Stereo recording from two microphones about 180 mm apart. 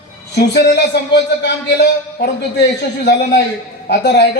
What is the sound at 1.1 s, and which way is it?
A man's voice, 65° left (ahead or behind).